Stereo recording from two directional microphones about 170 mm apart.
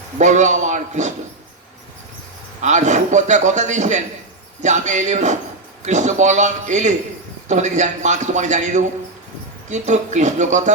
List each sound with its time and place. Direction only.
0.2 s a man's voice: 45° right (ahead or behind)
2.6 s a man's voice: 45° right (ahead or behind)